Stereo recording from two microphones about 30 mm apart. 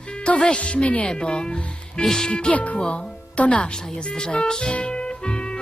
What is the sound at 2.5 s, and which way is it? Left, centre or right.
Speech, left.